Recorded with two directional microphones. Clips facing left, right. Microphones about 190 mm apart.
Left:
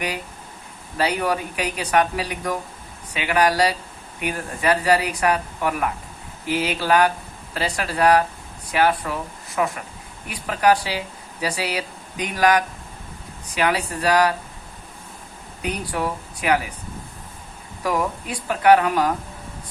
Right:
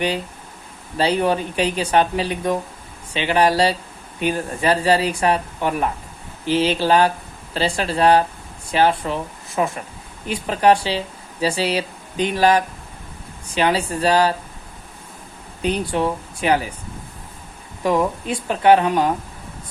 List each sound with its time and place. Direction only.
0.9 s speech: 25° right (ahead or behind)
15.6 s speech: 25° right (ahead or behind)
17.8 s speech: 25° right (ahead or behind)